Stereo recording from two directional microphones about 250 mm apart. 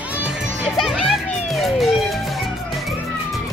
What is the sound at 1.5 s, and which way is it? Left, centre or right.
Music, centre.